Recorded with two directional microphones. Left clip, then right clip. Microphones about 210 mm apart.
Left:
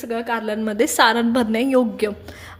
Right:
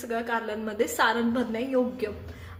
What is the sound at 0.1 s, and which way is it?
A woman's voice, 35° left (ahead or behind).